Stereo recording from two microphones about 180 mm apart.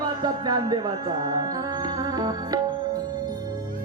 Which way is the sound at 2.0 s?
20° right (ahead or behind).